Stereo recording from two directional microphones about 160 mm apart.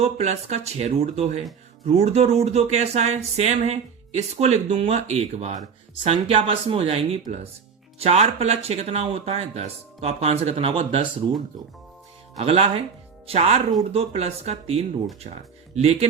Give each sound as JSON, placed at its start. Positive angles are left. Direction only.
{"t": 0.0, "sound": "speech", "side_deg": -45}
{"t": 12.4, "sound": "speech", "side_deg": -40}